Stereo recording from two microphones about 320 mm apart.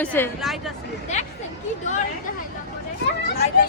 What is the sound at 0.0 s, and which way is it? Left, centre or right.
Speech, centre.